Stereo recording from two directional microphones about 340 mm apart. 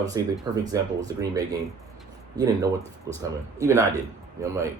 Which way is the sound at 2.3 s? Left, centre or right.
Centre.